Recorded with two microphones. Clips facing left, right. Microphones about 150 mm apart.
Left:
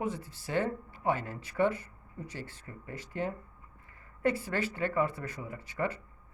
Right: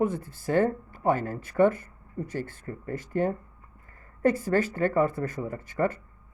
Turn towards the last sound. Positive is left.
turn(degrees=-50)  # may be behind; listen again after turning